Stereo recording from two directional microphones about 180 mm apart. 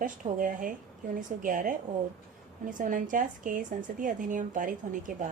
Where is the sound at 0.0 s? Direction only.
50° right (ahead or behind).